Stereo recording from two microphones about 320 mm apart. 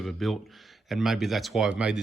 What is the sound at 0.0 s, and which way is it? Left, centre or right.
Speech, centre.